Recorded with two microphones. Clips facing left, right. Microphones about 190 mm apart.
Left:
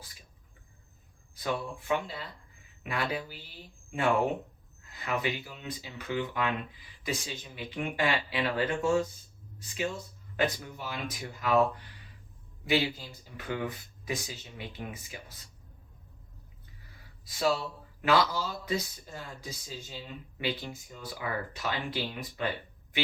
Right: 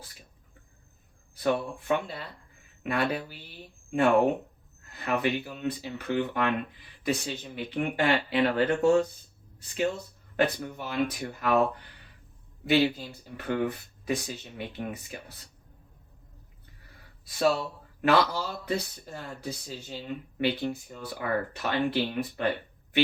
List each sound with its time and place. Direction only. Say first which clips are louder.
1.4 s speech: right 6 dB; 60° right (ahead or behind)
17.2 s speech: right 3 dB; 60° right (ahead or behind)